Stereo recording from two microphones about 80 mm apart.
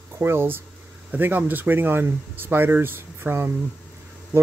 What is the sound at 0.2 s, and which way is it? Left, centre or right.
Speech, right.